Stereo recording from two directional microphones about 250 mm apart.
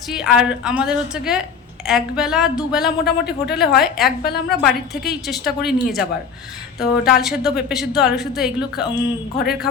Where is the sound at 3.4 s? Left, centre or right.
Left.